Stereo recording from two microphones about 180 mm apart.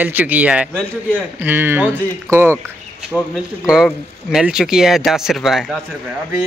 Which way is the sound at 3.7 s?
5° right (ahead or behind).